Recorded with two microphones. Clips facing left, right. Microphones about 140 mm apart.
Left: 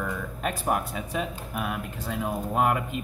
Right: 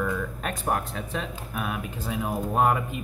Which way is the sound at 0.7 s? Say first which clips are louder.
Even; 10° left (ahead or behind).